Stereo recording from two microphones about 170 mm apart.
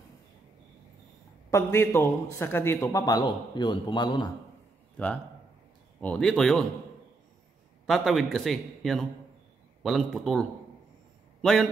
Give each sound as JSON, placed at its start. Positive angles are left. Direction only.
{"t": 1.5, "sound": "a man's voice", "side_deg": 15}
{"t": 4.9, "sound": "a man's voice", "side_deg": 5}
{"t": 7.8, "sound": "a man's voice", "side_deg": 0}
{"t": 11.4, "sound": "a man's voice", "side_deg": 5}